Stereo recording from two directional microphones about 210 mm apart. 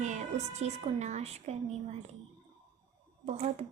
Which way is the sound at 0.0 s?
35° right (ahead or behind).